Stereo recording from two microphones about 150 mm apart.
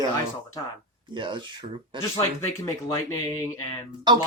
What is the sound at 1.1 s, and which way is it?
Speech, 30° right (ahead or behind).